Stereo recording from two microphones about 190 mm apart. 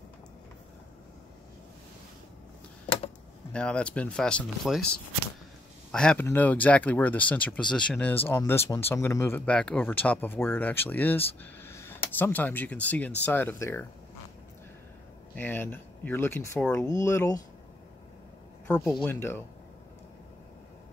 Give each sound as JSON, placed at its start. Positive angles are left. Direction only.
{"t": 3.5, "sound": "speech", "side_deg": 5}
{"t": 5.9, "sound": "speech", "side_deg": 5}
{"t": 15.3, "sound": "speech", "side_deg": 10}
{"t": 19.0, "sound": "speech", "side_deg": 10}